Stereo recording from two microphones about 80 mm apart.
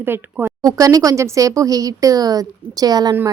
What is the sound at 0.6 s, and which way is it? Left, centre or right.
A woman's voice, right.